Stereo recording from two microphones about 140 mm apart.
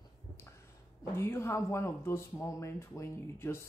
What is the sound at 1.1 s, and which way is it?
Speech, 20° left (ahead or behind).